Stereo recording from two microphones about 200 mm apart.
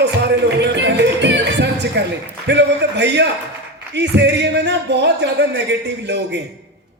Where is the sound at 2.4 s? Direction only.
60° right (ahead or behind).